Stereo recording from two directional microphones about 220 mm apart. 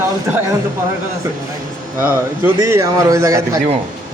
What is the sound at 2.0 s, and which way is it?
A man's voice, 10° right (ahead or behind).